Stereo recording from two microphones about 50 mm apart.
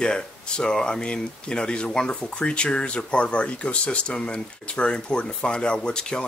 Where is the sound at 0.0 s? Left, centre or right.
Centre.